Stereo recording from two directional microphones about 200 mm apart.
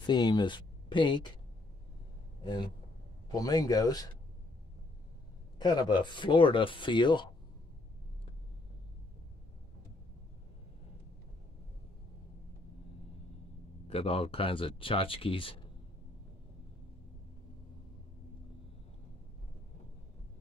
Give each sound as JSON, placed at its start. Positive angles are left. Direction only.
{"t": 0.0, "sound": "speech", "side_deg": 20}
{"t": 2.4, "sound": "speech", "side_deg": 25}
{"t": 5.6, "sound": "speech", "side_deg": 20}
{"t": 13.8, "sound": "speech", "side_deg": 30}